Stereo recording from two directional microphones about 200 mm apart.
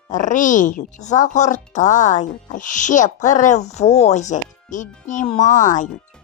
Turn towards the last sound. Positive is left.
turn(degrees=40)  # may be behind; listen again after turning